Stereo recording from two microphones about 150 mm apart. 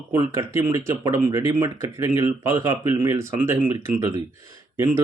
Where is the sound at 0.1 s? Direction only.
20° right (ahead or behind).